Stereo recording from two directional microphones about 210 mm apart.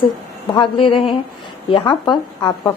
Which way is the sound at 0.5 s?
25° left (ahead or behind).